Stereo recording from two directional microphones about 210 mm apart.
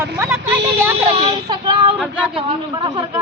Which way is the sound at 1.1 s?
30° right (ahead or behind).